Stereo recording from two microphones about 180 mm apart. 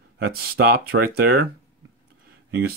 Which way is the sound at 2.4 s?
60° right (ahead or behind).